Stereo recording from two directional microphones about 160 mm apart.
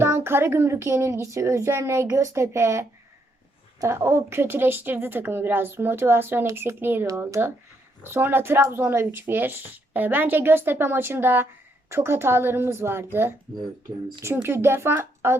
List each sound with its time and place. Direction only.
0.0 s speech: 15° right (ahead or behind)
14.2 s speech: 15° right (ahead or behind)